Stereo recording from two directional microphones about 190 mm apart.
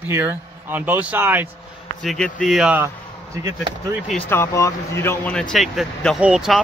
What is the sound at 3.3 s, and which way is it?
Speech, 15° right (ahead or behind).